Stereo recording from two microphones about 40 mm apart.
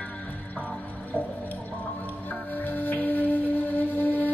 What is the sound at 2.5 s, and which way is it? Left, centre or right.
Music, left.